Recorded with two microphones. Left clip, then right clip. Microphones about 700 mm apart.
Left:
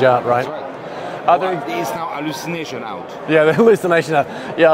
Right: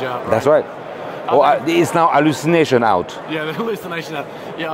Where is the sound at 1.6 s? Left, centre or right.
Right.